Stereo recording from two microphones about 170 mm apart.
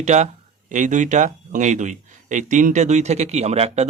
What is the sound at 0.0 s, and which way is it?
Speech, 40° right (ahead or behind).